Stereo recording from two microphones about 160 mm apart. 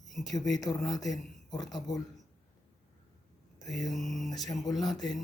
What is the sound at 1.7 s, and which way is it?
Speech, 25° left (ahead or behind).